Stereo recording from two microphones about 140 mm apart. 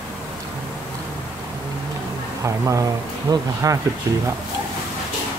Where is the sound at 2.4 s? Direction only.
20° right (ahead or behind).